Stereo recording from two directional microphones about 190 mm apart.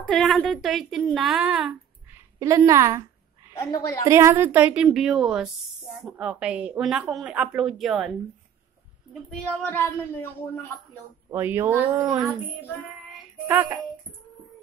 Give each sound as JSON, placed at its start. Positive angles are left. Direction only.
{"t": 0.1, "sound": "a woman's voice", "side_deg": 5}
{"t": 2.3, "sound": "speech", "side_deg": -15}
{"t": 4.1, "sound": "a woman's voice", "side_deg": -15}
{"t": 9.3, "sound": "speech", "side_deg": 10}
{"t": 11.2, "sound": "speech", "side_deg": -10}
{"t": 13.5, "sound": "speech", "side_deg": -10}